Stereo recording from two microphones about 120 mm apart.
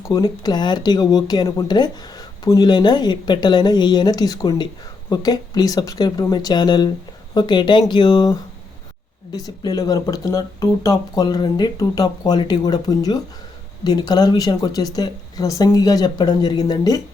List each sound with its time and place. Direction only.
0.1 s speech: 35° left (ahead or behind)
9.3 s speech: 30° left (ahead or behind)